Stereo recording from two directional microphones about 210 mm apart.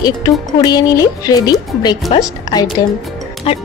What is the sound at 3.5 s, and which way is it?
Speech, 30° left (ahead or behind).